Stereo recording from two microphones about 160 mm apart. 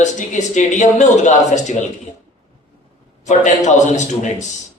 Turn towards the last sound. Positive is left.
turn(degrees=50)  # may be behind; listen again after turning